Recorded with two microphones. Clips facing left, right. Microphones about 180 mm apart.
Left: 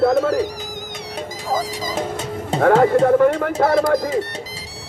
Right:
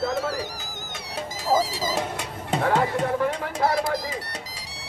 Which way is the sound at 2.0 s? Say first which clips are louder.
Left 5 dB; 25° left (ahead or behind).